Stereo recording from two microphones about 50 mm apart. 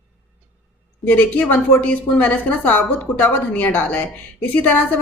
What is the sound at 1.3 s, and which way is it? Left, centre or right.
Speech, left.